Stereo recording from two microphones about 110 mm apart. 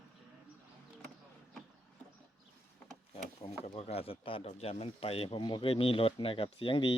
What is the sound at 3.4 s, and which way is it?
Speech, 65° left (ahead or behind).